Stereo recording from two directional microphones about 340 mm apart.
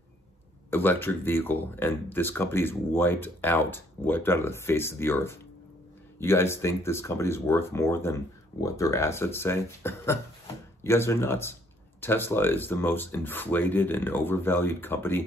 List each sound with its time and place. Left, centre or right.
0.7 s speech: centre